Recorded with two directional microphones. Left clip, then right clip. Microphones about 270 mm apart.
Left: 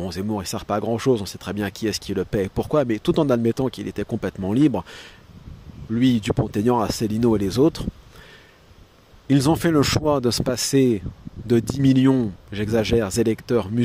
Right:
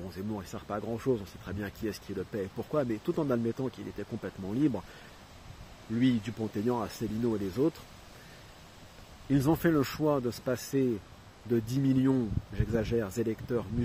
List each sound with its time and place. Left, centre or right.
0.0 s speech: left
5.9 s speech: left
9.3 s speech: left